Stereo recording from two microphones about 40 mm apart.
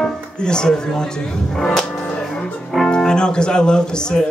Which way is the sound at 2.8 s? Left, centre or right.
Centre.